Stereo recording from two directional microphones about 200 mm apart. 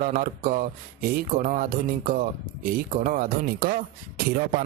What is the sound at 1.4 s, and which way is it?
Speech, 40° right (ahead or behind).